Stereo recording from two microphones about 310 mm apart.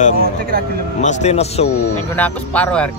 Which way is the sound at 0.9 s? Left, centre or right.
Left.